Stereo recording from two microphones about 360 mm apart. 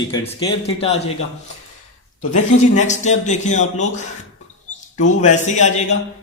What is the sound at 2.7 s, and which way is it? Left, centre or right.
Speech, centre.